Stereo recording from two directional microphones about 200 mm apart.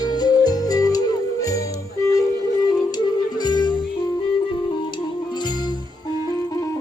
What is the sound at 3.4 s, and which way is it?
Music, 20° left (ahead or behind).